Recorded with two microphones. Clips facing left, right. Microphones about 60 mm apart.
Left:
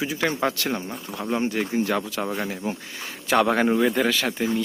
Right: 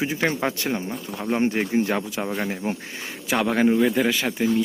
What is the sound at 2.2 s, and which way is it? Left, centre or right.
Speech, centre.